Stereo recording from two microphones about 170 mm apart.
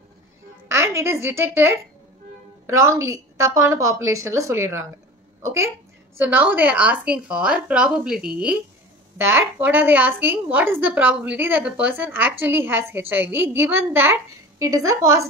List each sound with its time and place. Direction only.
0.7 s a woman's voice: 15° right (ahead or behind)
6.1 s a woman's voice: 10° right (ahead or behind)